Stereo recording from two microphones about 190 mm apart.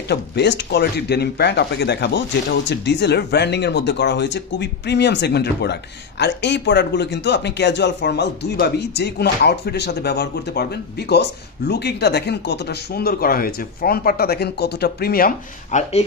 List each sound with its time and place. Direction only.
0.1 s speech: 60° left (ahead or behind)